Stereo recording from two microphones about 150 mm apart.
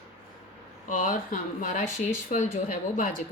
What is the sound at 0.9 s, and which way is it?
Speech, 65° left (ahead or behind).